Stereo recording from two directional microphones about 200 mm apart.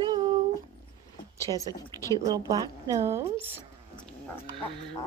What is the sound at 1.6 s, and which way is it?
Speech, 15° left (ahead or behind).